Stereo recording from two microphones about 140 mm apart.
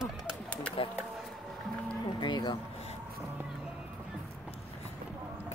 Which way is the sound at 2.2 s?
30° left (ahead or behind).